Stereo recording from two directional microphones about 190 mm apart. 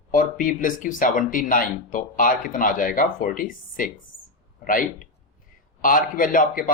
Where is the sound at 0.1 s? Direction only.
45° left (ahead or behind).